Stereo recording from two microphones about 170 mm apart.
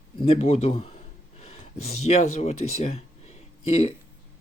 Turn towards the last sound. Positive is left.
turn(degrees=40)  # may be behind; listen again after turning